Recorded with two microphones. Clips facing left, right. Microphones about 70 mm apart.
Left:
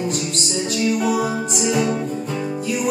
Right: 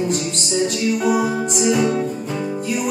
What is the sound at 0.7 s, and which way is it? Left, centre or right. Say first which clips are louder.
Music: left 2 dB; centre.